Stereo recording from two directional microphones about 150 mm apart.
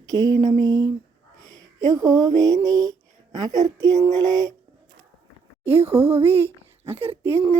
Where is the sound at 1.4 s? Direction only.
25° right (ahead or behind).